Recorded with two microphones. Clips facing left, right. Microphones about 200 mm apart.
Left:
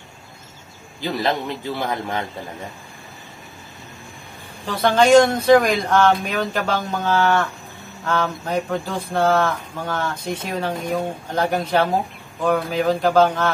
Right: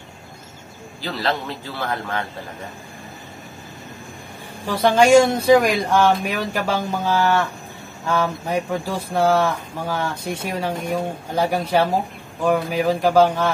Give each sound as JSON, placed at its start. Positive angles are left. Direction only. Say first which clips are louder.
{"t": 1.0, "sound": "a man's voice", "louder": "left 2 dB", "side_deg": 15}
{"t": 4.8, "sound": "speech", "louder": "even", "side_deg": -10}